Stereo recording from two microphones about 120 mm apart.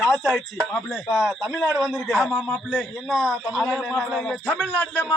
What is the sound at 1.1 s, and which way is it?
Speech, centre (ahead or behind).